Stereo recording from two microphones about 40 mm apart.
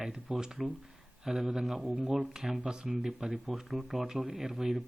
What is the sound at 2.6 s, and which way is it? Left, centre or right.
Speech, centre.